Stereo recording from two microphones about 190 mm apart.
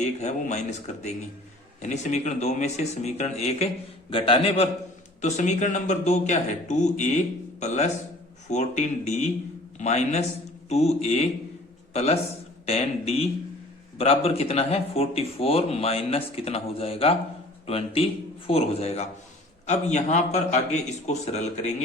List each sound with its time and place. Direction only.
0.0 s a man's voice: 40° left (ahead or behind)
12.6 s speech: 30° left (ahead or behind)